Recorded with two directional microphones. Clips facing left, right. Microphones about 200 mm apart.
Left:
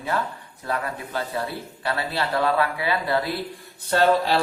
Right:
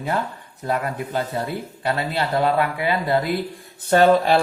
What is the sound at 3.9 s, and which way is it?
Speech, 50° right (ahead or behind).